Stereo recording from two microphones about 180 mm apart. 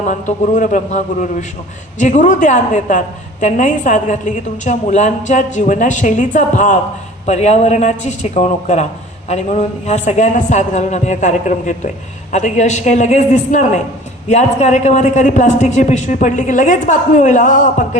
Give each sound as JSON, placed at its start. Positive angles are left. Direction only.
{"t": 0.1, "sound": "a man's voice", "side_deg": 45}